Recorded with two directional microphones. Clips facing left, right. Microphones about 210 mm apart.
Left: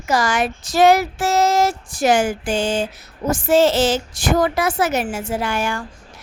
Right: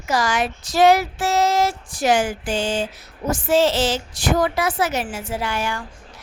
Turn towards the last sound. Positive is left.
turn(degrees=50)  # may be behind; listen again after turning